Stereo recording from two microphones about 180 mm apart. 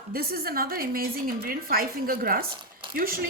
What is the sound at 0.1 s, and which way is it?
A woman's voice, 55° right (ahead or behind).